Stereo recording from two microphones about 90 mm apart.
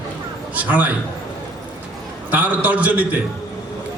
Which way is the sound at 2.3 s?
15° right (ahead or behind).